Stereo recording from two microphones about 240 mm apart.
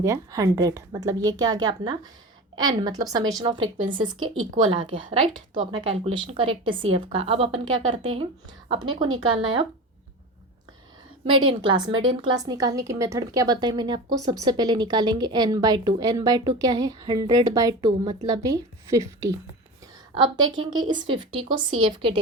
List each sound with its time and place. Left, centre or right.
0.0 s a woman's voice: centre
11.3 s a woman's voice: centre